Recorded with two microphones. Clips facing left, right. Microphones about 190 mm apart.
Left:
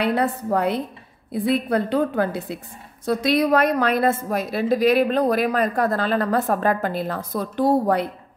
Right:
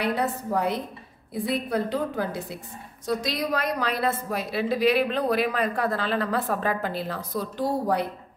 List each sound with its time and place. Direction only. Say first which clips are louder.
0.0 s a woman's voice: left 5 dB; 65° left (ahead or behind)